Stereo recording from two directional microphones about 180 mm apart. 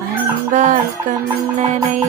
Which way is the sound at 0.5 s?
45° right (ahead or behind).